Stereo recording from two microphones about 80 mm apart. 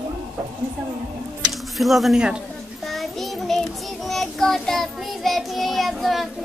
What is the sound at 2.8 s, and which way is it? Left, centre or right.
Child singing, centre.